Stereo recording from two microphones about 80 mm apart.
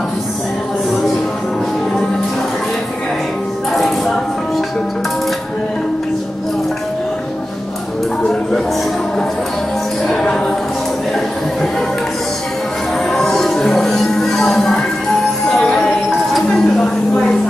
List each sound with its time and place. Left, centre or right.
3.7 s chopping: centre
10.0 s a capella: centre
13.1 s music: centre